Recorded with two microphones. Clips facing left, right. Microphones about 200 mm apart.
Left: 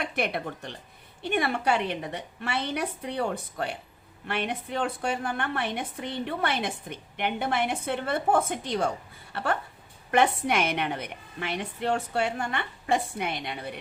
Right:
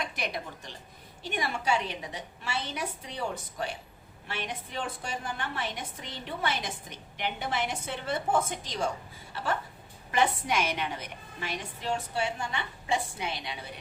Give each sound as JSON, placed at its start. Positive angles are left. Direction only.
{"t": 0.0, "sound": "a woman's voice", "side_deg": 60}